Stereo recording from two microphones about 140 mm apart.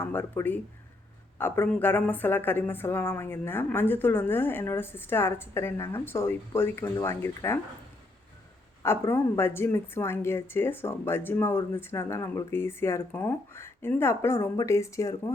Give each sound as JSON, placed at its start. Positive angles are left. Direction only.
{"t": 0.0, "sound": "speech", "side_deg": 15}
{"t": 8.8, "sound": "speech", "side_deg": 15}